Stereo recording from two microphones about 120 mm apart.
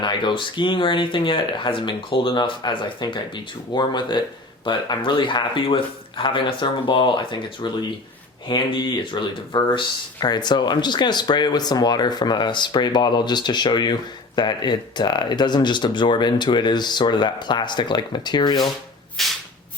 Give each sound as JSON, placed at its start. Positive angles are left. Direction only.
{"t": 0.0, "sound": "speech", "side_deg": 40}
{"t": 19.2, "sound": "shuffle", "side_deg": 0}